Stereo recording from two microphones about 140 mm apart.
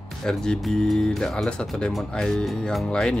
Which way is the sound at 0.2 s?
5° left (ahead or behind).